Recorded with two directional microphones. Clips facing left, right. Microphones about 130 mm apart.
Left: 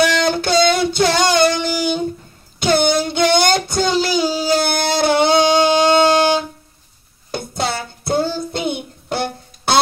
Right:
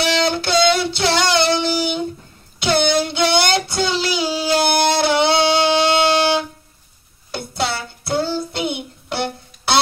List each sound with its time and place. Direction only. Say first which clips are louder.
0.0 s music: left 3 dB; 45° left (ahead or behind)
2.6 s a sound: left 2 dB; 45° left (ahead or behind)
4.9 s music: left 2 dB; 45° left (ahead or behind)
7.2 s child singing: left 1 dB; 45° left (ahead or behind)